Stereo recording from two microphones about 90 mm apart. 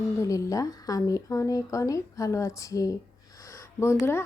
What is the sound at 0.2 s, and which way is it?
A woman's voice, 40° left (ahead or behind).